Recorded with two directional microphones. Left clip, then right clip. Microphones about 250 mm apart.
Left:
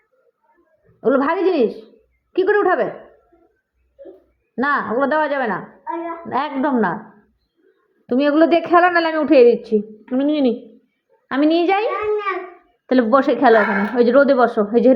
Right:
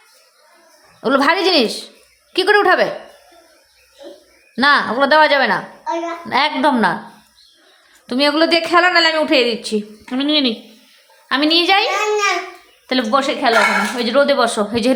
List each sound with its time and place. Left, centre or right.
1.0 s a woman's voice: centre
4.5 s a woman's voice: centre
5.5 s a child's voice: right
6.3 s a woman's voice: centre
8.0 s a woman's voice: centre
12.9 s speech: centre